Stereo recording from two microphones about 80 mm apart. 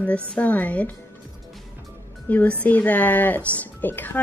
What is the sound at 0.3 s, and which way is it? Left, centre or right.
Speech, centre.